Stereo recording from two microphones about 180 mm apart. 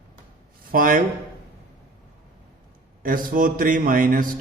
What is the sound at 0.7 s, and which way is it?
Speech, 50° right (ahead or behind).